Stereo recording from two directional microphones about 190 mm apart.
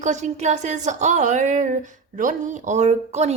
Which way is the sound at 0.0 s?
40° right (ahead or behind).